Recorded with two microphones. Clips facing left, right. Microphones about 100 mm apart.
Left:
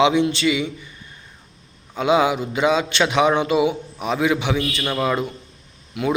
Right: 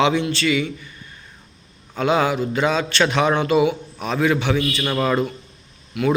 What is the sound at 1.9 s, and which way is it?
A man's voice, 10° left (ahead or behind).